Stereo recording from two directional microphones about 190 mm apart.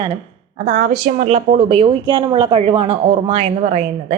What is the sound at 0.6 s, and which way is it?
A woman's voice, 45° right (ahead or behind).